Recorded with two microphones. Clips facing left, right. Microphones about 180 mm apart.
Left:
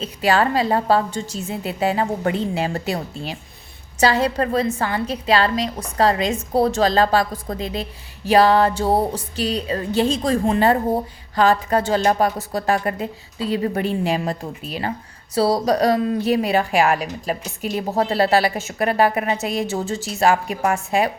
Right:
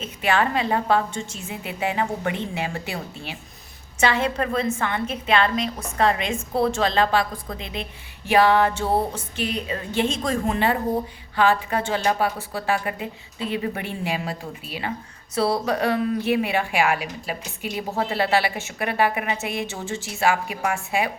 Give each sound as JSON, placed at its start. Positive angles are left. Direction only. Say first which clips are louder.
{"t": 0.0, "sound": "a woman's voice", "louder": "left 4 dB", "side_deg": 35}